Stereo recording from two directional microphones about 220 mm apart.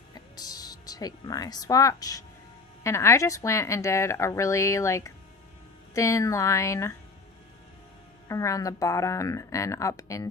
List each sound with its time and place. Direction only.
0.1 s music: 15° left (ahead or behind)
2.8 s speech: 10° left (ahead or behind)
8.3 s speech: 15° left (ahead or behind)